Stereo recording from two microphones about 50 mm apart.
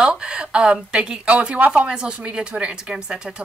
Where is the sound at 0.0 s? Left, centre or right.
Centre.